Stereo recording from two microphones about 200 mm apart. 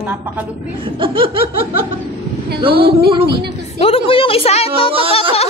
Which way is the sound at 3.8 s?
30° left (ahead or behind).